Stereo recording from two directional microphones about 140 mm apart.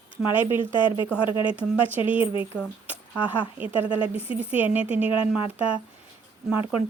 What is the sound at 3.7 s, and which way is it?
Speech, 40° left (ahead or behind).